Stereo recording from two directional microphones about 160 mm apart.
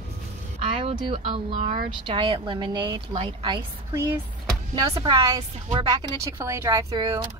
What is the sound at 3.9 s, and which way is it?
A woman's voice, 15° right (ahead or behind).